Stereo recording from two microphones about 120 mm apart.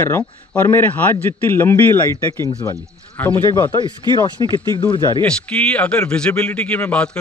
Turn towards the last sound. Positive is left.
turn(degrees=10)  # may be behind; listen again after turning